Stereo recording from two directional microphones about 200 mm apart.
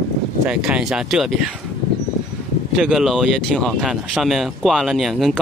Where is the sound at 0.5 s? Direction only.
5° right (ahead or behind).